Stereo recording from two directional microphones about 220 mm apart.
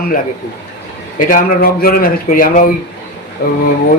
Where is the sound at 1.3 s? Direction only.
40° left (ahead or behind).